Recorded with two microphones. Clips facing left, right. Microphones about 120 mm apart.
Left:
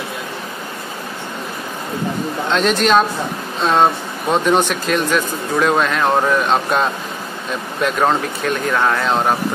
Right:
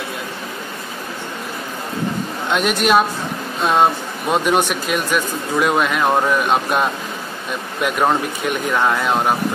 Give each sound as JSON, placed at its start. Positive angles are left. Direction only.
{"t": 2.5, "sound": "speech", "side_deg": -10}
{"t": 8.1, "sound": "speech", "side_deg": -15}